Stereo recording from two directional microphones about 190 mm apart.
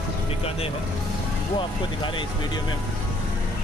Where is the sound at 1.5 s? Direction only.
25° left (ahead or behind).